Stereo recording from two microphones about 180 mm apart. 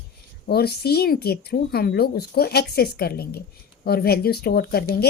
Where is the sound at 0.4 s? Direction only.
60° left (ahead or behind).